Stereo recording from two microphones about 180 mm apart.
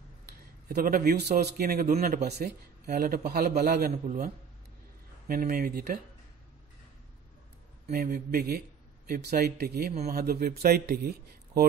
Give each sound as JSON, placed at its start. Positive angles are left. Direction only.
{"t": 0.7, "sound": "a man's voice", "side_deg": -55}
{"t": 5.3, "sound": "speech", "side_deg": -55}
{"t": 7.9, "sound": "a man's voice", "side_deg": -55}